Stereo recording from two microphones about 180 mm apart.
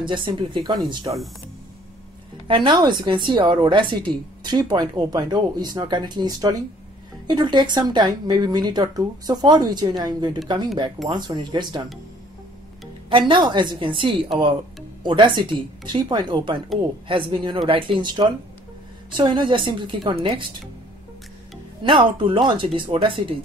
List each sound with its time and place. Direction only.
0.0 s a woman's voice: 25° right (ahead or behind)
2.4 s a woman's voice: 25° right (ahead or behind)
13.1 s a woman's voice: 25° right (ahead or behind)
21.8 s a woman's voice: 25° right (ahead or behind)